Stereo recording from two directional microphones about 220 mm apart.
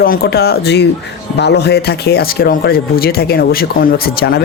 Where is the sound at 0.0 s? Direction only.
40° left (ahead or behind).